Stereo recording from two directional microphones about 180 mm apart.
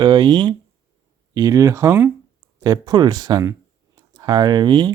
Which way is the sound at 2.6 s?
25° right (ahead or behind).